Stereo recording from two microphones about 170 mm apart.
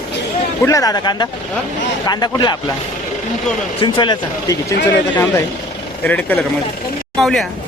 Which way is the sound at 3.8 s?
25° left (ahead or behind).